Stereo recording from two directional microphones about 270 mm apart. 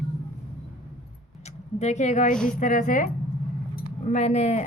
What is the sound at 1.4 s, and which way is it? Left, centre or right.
A woman's voice, left.